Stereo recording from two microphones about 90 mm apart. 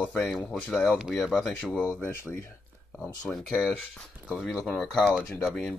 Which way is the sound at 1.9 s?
25° left (ahead or behind).